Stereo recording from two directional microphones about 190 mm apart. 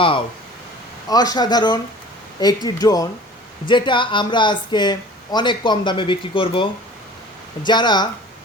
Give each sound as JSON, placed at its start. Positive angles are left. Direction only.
{"t": 1.0, "sound": "speech", "side_deg": 20}